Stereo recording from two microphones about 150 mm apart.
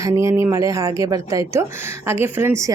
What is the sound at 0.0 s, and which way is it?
Speech, 20° right (ahead or behind).